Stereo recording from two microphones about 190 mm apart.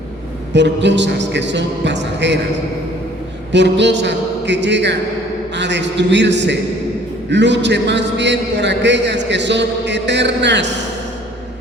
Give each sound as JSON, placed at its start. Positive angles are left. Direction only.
{"t": 0.5, "sound": "a man's voice", "side_deg": -65}
{"t": 3.5, "sound": "a man's voice", "side_deg": -65}